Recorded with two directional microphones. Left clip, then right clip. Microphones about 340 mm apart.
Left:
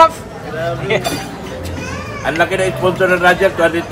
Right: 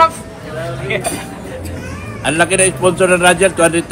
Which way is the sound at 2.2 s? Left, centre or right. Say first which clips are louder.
Right 2 dB; right.